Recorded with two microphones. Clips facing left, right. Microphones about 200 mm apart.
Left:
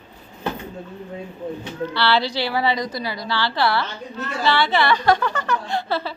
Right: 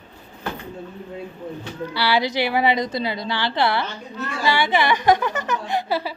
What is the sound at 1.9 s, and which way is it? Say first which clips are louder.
A woman's voice: even; 15° right (ahead or behind).